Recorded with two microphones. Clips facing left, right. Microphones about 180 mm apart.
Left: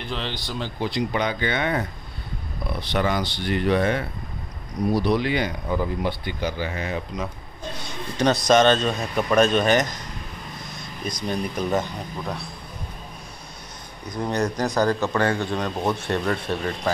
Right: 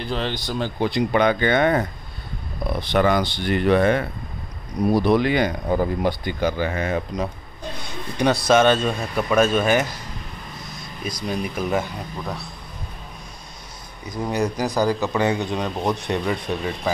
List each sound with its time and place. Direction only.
0.0 s speech: 45° right (ahead or behind)
8.5 s speech: 10° right (ahead or behind)
11.1 s speech: 5° right (ahead or behind)
14.0 s speech: 5° right (ahead or behind)